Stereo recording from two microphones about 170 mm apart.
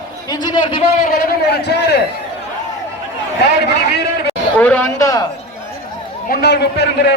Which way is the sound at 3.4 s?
75° left (ahead or behind).